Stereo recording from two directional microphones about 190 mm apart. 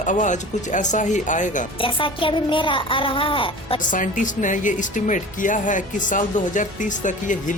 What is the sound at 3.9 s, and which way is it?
Speech, 45° left (ahead or behind).